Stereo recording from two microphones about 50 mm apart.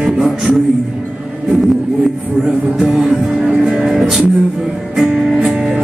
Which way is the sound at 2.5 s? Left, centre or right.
Right.